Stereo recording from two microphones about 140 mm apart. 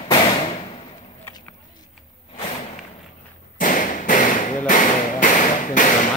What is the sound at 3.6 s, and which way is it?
Thump, 70° left (ahead or behind).